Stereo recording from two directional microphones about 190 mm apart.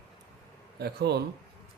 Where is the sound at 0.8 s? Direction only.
60° right (ahead or behind).